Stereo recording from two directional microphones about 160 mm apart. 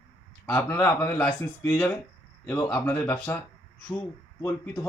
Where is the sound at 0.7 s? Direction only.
15° left (ahead or behind).